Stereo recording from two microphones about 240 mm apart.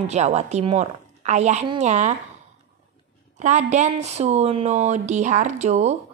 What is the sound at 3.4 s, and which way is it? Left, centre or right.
Speech, right.